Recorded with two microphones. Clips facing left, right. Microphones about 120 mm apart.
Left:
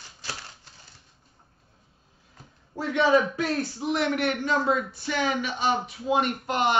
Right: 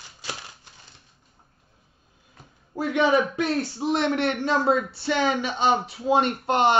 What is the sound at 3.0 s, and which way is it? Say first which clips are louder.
A man's voice: even; 20° right (ahead or behind).